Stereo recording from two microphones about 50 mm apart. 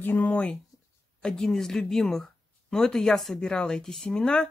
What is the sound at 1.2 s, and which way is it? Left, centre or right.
Speech, centre.